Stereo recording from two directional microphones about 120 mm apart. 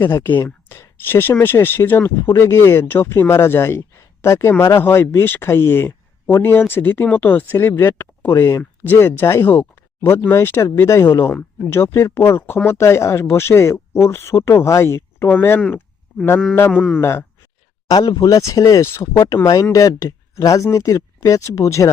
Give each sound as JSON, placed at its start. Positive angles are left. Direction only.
{"t": 0.0, "sound": "speech", "side_deg": 20}
{"t": 16.6, "sound": "speech", "side_deg": 0}
{"t": 17.0, "sound": "speech", "side_deg": 20}
{"t": 17.8, "sound": "speech", "side_deg": 30}